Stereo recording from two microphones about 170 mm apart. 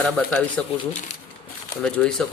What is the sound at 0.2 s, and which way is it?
Speech, 10° left (ahead or behind).